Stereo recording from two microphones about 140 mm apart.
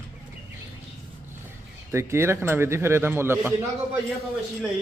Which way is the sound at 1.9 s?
20° right (ahead or behind).